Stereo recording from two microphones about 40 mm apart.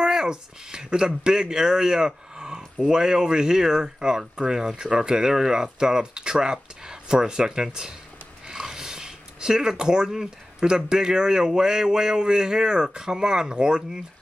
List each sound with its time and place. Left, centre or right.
0.0 s speech: centre
8.5 s a sound: centre
10.9 s speech: centre